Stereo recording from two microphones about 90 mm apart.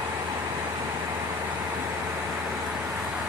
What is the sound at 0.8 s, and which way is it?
Vehicle, 40° right (ahead or behind).